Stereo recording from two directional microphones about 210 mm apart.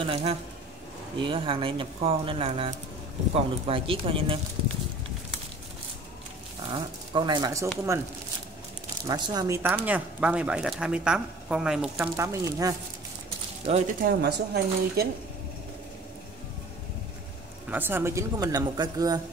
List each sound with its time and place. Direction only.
0.0 s speech: 25° right (ahead or behind)
6.7 s speech: 20° right (ahead or behind)
9.0 s speech: 20° right (ahead or behind); by 12.1 s 5° right (ahead or behind)
12.2 s speech: 15° right (ahead or behind)
13.7 s speech: 30° right (ahead or behind)
14.0 s speech: 50° right (ahead or behind)
17.6 s speech: 10° right (ahead or behind)